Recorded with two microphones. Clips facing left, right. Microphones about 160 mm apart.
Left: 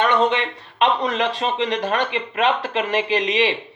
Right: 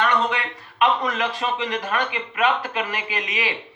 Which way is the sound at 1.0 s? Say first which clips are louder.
Left 3 dB; 30° left (ahead or behind).